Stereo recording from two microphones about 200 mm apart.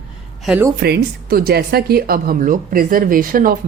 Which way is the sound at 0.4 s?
5° right (ahead or behind).